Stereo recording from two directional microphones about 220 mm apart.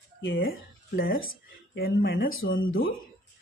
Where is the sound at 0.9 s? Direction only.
40° left (ahead or behind).